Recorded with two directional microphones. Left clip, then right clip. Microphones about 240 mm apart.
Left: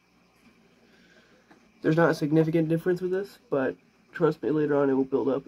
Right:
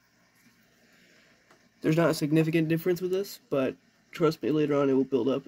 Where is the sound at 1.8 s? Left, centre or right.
Right.